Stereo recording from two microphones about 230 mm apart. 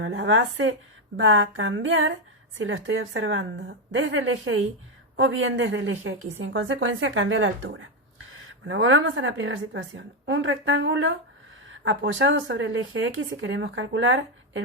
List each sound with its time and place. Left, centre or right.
0.0 s speech: right